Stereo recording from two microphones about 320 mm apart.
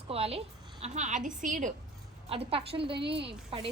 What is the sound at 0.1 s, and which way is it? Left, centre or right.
A woman's voice, centre.